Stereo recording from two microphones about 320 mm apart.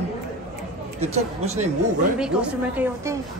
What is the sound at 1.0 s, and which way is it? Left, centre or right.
Speech, centre.